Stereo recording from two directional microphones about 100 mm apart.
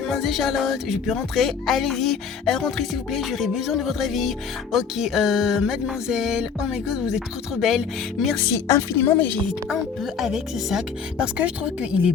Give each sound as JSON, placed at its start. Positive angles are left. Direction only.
{"t": 0.1, "sound": "music", "side_deg": 0}
{"t": 8.5, "sound": "a woman's voice", "side_deg": 30}
{"t": 9.4, "sound": "music", "side_deg": 0}
{"t": 10.2, "sound": "speech", "side_deg": -5}